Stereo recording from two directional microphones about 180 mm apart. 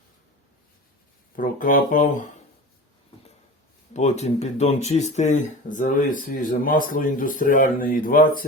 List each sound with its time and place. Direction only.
1.4 s speech: 50° left (ahead or behind)
3.9 s speech: 40° left (ahead or behind)